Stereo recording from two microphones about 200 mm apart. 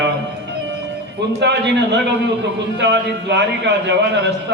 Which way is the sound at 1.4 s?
60° right (ahead or behind).